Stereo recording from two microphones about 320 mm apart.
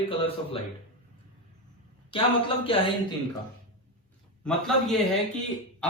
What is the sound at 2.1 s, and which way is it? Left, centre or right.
A man's voice, centre.